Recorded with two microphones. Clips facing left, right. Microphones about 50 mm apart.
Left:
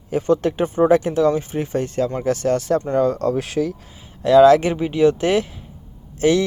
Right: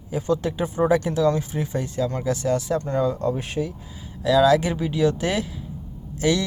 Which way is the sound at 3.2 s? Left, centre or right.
Left.